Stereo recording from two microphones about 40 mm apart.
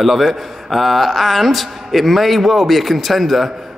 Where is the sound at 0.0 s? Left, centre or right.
Centre.